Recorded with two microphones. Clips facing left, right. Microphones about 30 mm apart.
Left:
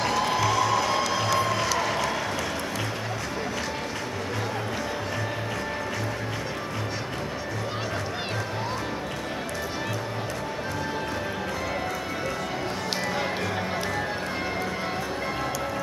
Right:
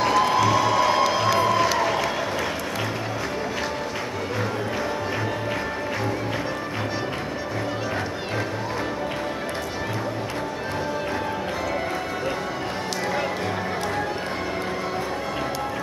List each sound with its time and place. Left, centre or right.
0.0 s music: centre